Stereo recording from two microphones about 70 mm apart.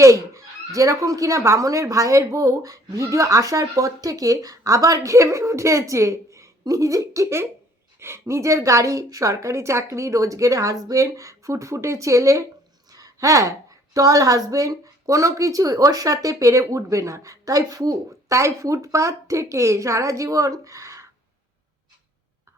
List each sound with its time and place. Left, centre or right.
0.0 s a woman's voice: right
18.3 s speech: right